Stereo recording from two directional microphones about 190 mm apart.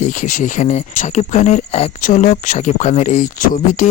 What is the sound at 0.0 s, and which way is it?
Speech, 40° left (ahead or behind).